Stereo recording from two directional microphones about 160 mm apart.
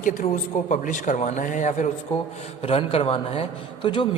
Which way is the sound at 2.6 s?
35° left (ahead or behind).